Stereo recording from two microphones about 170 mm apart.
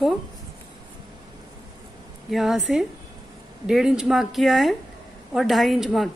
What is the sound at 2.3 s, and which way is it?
A woman's voice, centre (ahead or behind).